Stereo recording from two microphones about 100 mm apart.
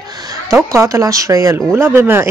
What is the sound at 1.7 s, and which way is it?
Speech, 20° right (ahead or behind).